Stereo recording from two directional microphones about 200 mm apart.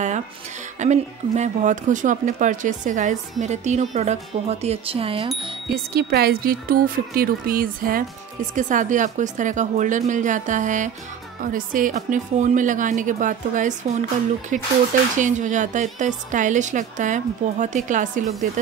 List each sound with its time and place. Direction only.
0.7 s speech: 35° right (ahead or behind)
5.9 s speech: 50° right (ahead or behind)